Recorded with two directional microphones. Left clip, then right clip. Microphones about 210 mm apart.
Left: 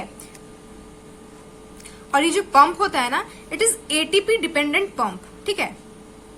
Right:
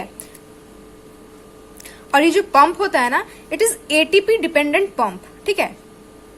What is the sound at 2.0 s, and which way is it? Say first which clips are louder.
A woman's voice: right 5 dB; 25° right (ahead or behind).